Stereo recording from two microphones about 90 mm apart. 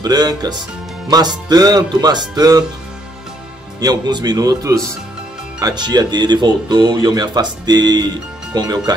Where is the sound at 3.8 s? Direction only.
50° right (ahead or behind).